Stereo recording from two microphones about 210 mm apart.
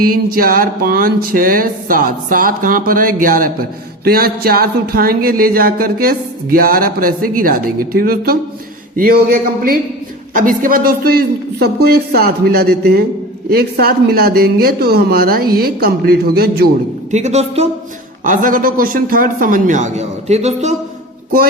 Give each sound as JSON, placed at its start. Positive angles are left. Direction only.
{"t": 0.0, "sound": "speech", "side_deg": -45}
{"t": 17.1, "sound": "a man's voice", "side_deg": -35}